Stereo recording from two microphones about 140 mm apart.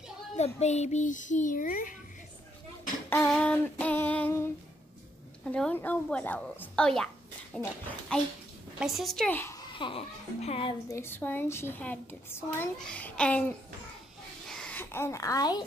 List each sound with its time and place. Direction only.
0.4 s a child's voice: 50° left (ahead or behind); by 2.0 s 70° left (ahead or behind)
3.1 s female singing: 10° left (ahead or behind)
5.4 s a woman's voice: 10° left (ahead or behind)
9.3 s a woman's voice: 15° left (ahead or behind)
9.6 s speech: 35° left (ahead or behind)
10.9 s a woman's voice: 15° left (ahead or behind)